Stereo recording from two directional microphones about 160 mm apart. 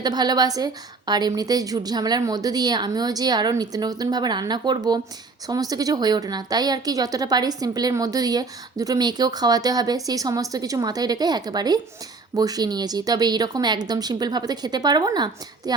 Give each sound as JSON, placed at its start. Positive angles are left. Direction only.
{"t": 0.0, "sound": "a woman's voice", "side_deg": -25}